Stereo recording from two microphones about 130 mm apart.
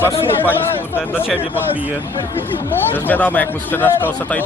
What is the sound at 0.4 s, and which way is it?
Speech, 15° left (ahead or behind).